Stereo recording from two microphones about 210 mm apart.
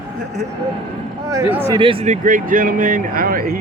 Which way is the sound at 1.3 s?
15° right (ahead or behind).